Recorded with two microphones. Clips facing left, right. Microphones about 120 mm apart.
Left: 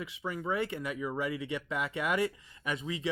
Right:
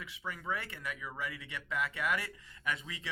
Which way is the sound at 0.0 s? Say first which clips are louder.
Left 6 dB; 20° left (ahead or behind).